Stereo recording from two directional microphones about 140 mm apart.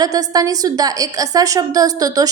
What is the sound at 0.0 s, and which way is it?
A woman's voice, 25° right (ahead or behind).